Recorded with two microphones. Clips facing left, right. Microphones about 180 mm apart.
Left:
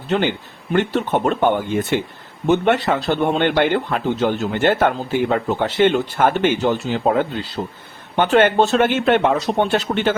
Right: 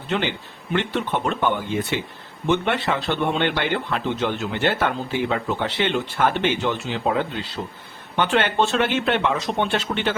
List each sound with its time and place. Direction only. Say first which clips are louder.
0.1 s a man's voice: left 5 dB; 45° left (ahead or behind)